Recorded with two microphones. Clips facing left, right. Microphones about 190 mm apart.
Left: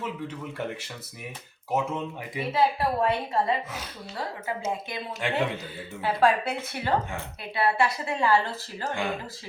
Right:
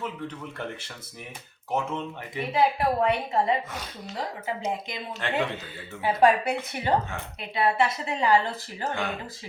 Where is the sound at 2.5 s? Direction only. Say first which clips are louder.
Right 1 dB; 20° right (ahead or behind).